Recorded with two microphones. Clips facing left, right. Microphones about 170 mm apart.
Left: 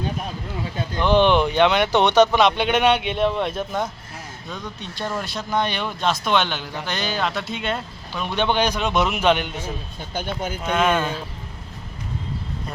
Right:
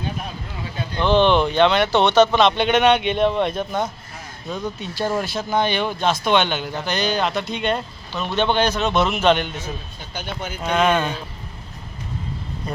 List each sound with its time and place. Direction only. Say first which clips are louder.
0.9 s a man's voice: right 1 dB; 15° left (ahead or behind)
10.2 s speech: left 3 dB; 50° left (ahead or behind)
10.6 s a man's voice: right 2 dB; 5° left (ahead or behind)